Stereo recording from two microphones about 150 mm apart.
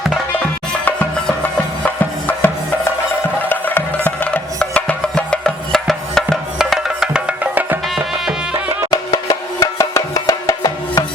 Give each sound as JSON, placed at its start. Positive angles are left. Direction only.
{"t": 1.8, "sound": "music", "side_deg": 10}
{"t": 3.5, "sound": "music", "side_deg": 15}
{"t": 8.9, "sound": "music", "side_deg": 25}